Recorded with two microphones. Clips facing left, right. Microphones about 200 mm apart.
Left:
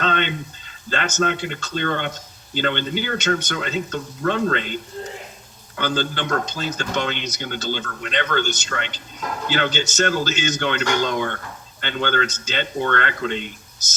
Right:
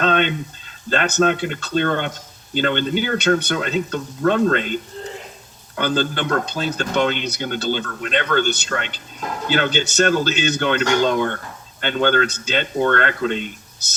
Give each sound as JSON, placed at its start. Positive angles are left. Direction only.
{"t": 0.0, "sound": "speech", "side_deg": -50}